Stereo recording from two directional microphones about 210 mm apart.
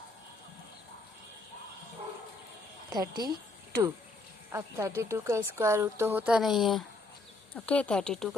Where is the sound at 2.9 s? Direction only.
20° right (ahead or behind).